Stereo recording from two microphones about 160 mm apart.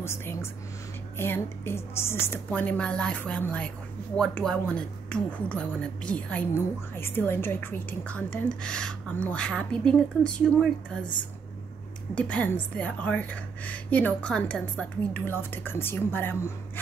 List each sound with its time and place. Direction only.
0.0 s speech: 15° left (ahead or behind)
12.2 s speech: 10° left (ahead or behind)